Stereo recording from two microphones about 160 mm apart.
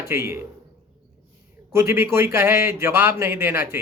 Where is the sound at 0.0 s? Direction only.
15° right (ahead or behind).